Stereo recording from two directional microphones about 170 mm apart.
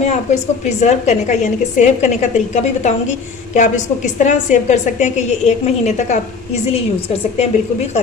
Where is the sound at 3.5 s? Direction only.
45° left (ahead or behind).